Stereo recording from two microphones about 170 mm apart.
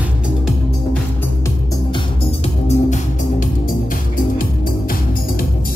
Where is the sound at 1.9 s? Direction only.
35° left (ahead or behind).